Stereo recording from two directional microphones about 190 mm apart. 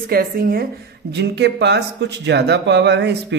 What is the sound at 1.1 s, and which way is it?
Speech, 65° right (ahead or behind).